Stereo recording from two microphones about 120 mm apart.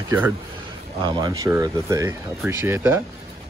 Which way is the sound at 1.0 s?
35° right (ahead or behind).